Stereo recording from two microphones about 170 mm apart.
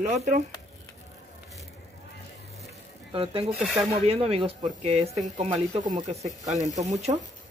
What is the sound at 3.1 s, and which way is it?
Speech, 30° right (ahead or behind).